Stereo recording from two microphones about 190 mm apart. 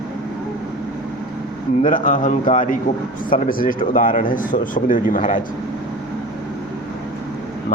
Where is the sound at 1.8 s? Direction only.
45° left (ahead or behind).